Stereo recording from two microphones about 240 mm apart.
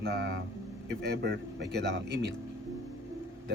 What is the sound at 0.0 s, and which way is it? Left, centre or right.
Speech, right.